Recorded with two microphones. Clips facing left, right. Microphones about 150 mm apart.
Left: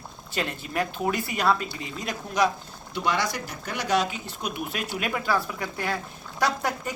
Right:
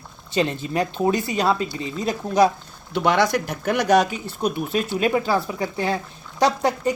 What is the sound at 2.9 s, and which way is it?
Speech, 65° right (ahead or behind).